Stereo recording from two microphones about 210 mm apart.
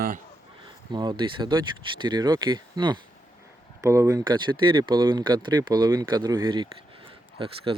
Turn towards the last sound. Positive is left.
turn(degrees=-25)  # may be behind; listen again after turning